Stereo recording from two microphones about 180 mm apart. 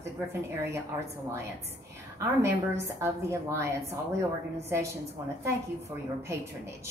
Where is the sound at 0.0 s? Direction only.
15° right (ahead or behind).